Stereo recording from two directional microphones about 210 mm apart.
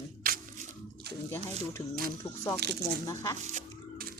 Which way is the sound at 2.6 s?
50° right (ahead or behind).